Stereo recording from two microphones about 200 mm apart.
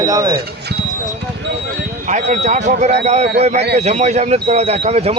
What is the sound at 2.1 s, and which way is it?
Speech, 35° right (ahead or behind).